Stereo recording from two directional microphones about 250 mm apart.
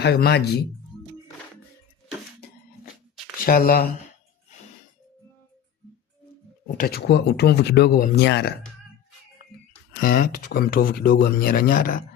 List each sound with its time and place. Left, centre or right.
0.0 s speech: left
3.3 s speech: left
6.7 s speech: left
9.9 s speech: left